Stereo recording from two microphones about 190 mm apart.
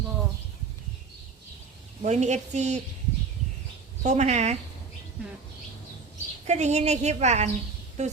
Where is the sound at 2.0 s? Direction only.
40° right (ahead or behind).